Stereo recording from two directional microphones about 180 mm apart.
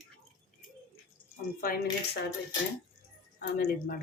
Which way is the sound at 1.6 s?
55° left (ahead or behind).